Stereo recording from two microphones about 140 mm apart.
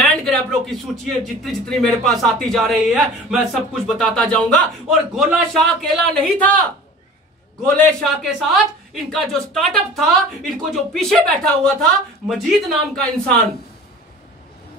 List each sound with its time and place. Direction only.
0.1 s speech: 5° left (ahead or behind)
7.6 s speech: centre (ahead or behind)